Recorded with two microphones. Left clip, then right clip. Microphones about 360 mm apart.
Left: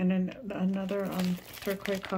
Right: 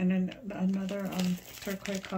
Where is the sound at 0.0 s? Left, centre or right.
Centre.